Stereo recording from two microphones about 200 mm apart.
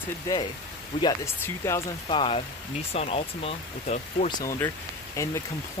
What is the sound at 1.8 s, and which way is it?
Speech, 25° left (ahead or behind).